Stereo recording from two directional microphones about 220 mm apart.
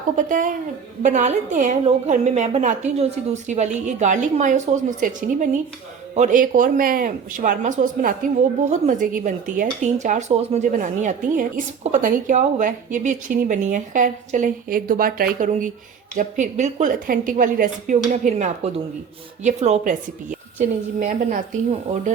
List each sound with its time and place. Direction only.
0.2 s speech: 35° right (ahead or behind)
21.0 s speech: 35° right (ahead or behind)